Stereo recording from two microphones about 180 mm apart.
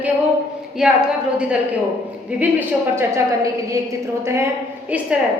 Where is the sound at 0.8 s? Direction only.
5° right (ahead or behind).